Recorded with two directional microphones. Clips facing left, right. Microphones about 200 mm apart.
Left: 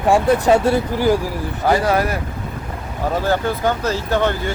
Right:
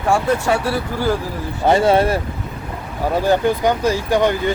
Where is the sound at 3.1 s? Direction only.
15° right (ahead or behind).